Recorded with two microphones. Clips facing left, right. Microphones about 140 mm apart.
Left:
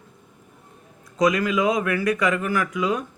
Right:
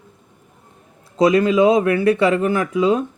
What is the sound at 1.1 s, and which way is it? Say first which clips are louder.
Speech: right 6 dB; 30° right (ahead or behind).